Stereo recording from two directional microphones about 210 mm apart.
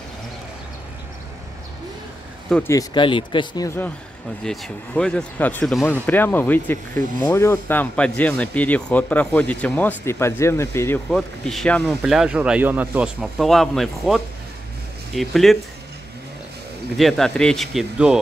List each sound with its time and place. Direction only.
2.5 s speech: 10° left (ahead or behind)
11.1 s speech: centre (ahead or behind)
16.9 s speech: centre (ahead or behind)